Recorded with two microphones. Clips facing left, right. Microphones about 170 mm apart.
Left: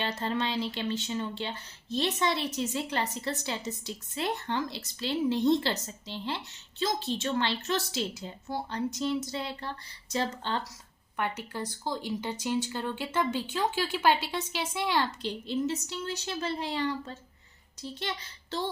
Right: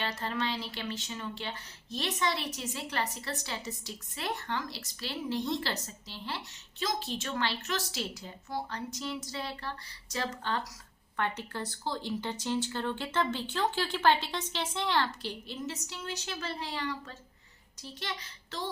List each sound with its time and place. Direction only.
0.0 s speech: 25° left (ahead or behind)
11.2 s speech: 10° left (ahead or behind); by 18.7 s 30° left (ahead or behind)